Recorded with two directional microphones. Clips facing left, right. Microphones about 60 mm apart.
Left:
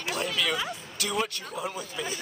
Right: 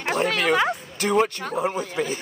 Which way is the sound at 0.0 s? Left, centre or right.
Right.